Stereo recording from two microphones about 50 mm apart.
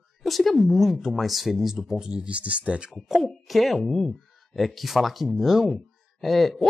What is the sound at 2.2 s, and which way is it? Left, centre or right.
Speech, right.